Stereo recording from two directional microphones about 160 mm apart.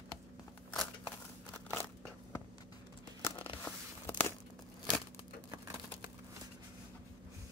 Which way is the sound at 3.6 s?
10° left (ahead or behind).